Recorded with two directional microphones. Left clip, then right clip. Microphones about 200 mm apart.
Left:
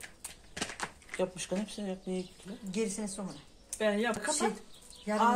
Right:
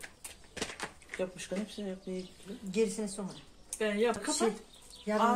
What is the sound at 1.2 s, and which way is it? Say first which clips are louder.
Speech: left 3 dB; 55° left (ahead or behind).